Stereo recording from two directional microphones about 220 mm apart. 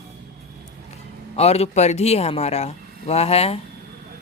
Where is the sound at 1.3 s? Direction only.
30° left (ahead or behind).